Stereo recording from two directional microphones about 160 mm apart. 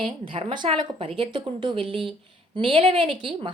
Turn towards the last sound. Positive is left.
turn(degrees=-35)  # may be behind; listen again after turning